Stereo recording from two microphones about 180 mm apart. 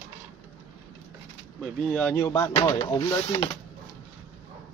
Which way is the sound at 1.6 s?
5° left (ahead or behind).